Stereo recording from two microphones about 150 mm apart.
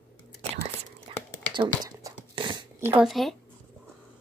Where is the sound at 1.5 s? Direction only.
30° right (ahead or behind).